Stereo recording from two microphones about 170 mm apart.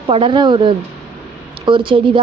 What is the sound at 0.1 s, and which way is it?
A woman's voice, 30° right (ahead or behind).